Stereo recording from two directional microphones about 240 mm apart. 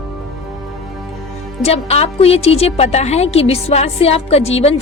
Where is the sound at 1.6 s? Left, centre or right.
Left.